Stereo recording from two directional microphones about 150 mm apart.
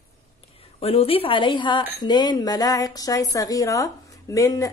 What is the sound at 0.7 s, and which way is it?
A woman's voice, 40° left (ahead or behind).